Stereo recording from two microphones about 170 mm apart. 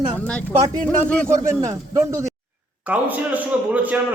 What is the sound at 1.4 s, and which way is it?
A man's voice, 15° right (ahead or behind).